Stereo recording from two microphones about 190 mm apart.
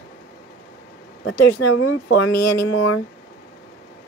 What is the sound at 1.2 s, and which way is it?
Speech, 70° left (ahead or behind).